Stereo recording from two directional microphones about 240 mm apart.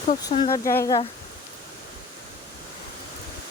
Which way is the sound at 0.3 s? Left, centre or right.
Centre.